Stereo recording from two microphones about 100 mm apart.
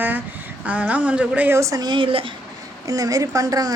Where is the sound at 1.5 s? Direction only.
35° right (ahead or behind); by 2.3 s 60° right (ahead or behind).